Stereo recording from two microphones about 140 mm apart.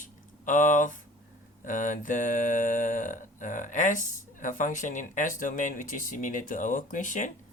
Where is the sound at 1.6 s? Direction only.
65° left (ahead or behind).